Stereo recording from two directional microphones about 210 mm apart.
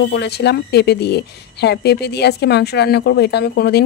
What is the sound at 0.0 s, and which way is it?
A woman's voice, 55° left (ahead or behind).